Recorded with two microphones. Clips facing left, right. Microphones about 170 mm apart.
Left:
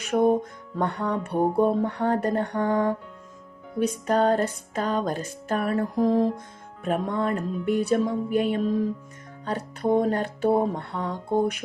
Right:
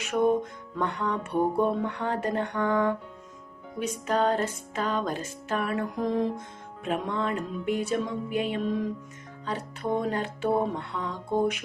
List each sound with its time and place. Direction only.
0.1 s music: 35° left (ahead or behind)